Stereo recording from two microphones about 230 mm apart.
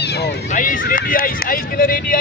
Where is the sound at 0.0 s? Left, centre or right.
Left.